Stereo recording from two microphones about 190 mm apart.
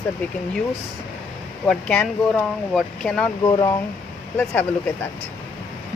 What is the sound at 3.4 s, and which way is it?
Speech, 20° left (ahead or behind).